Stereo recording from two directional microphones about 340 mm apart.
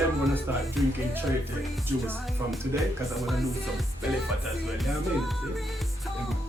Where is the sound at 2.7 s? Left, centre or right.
Centre.